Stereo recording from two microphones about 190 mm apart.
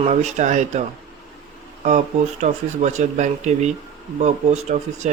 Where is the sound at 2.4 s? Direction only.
35° right (ahead or behind).